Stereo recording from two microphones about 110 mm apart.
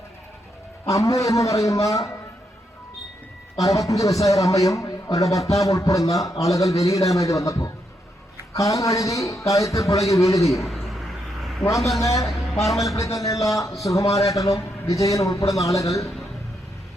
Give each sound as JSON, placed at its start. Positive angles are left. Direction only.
{"t": 0.9, "sound": "a man's voice", "side_deg": 30}
{"t": 3.6, "sound": "a man's voice", "side_deg": 30}
{"t": 10.6, "sound": "a sound", "side_deg": 0}
{"t": 11.9, "sound": "a man's voice", "side_deg": 30}